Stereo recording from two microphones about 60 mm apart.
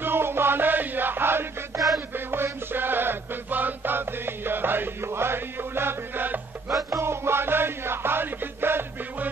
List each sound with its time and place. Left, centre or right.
0.0 s music: right
1.7 s music: right
2.1 s music: right
6.7 s music: right